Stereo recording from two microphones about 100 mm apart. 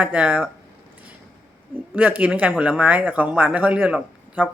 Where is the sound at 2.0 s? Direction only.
15° right (ahead or behind).